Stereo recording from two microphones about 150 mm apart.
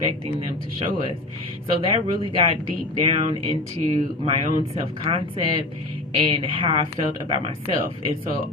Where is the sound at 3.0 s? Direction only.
35° right (ahead or behind).